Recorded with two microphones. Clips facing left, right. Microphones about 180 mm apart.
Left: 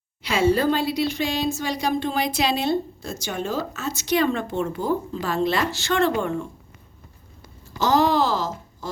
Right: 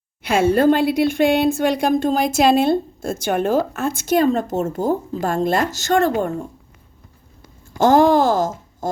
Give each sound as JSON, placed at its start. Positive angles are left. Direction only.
{"t": 0.2, "sound": "a woman's voice", "side_deg": -55}
{"t": 7.7, "sound": "speech", "side_deg": -50}